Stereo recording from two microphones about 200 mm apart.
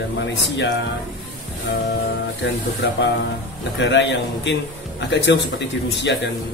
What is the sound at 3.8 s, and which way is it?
A man's voice, 65° left (ahead or behind).